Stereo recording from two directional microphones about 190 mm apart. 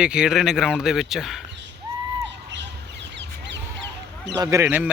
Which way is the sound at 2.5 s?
65° right (ahead or behind).